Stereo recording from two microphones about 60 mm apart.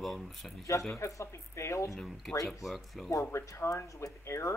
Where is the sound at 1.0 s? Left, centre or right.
Left.